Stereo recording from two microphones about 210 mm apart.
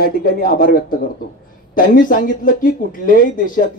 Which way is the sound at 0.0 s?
45° left (ahead or behind).